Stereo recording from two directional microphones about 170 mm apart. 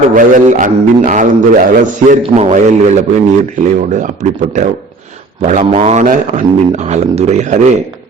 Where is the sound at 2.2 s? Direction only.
35° right (ahead or behind).